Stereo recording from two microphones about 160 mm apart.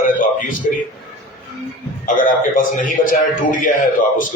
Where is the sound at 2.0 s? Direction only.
60° left (ahead or behind).